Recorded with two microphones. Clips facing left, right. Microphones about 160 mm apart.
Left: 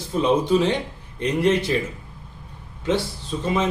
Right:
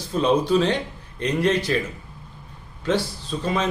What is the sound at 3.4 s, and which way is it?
Speech, 20° left (ahead or behind).